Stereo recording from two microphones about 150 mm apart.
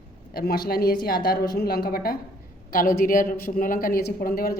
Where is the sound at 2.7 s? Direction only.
70° left (ahead or behind).